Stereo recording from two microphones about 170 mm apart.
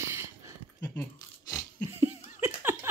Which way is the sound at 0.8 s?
15° left (ahead or behind).